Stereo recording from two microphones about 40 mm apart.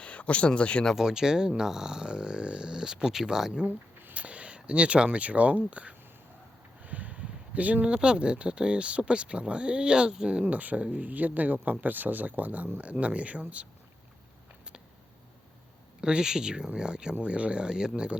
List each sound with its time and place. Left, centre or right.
0.0 s speech: left
0.9 s speech: centre
4.1 s a sound: right
5.1 s speech: right
6.8 s a sound: right
7.9 s speech: right
10.4 s speech: right
16.0 s speech: centre
17.2 s speech: right